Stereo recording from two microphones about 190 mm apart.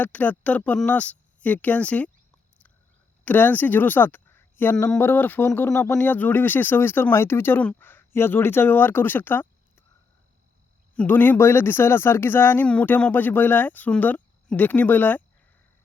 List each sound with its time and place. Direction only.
0.0 s speech: 10° left (ahead or behind)
3.2 s speech: 10° left (ahead or behind)
10.9 s speech: 10° left (ahead or behind)